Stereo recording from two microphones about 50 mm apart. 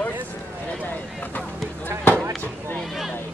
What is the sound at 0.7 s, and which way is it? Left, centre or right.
Speech, left.